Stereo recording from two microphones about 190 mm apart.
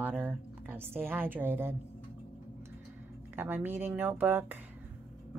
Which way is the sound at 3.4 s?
10° right (ahead or behind).